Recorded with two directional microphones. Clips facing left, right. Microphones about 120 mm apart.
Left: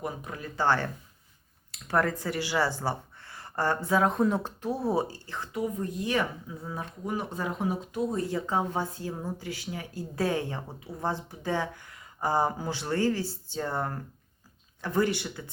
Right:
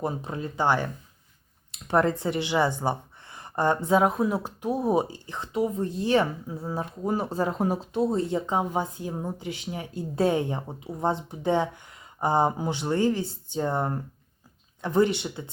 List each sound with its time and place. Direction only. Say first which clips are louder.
0.0 s speech: right 5 dB; 30° right (ahead or behind)
4.1 s speech: even; 5° right (ahead or behind); by 7.9 s 35° right (ahead or behind)
7.9 s speech: right 6 dB; 25° right (ahead or behind)